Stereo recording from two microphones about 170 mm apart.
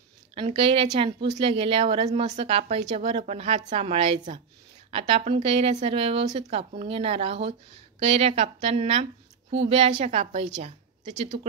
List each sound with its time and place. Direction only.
0.3 s a woman's voice: 35° right (ahead or behind)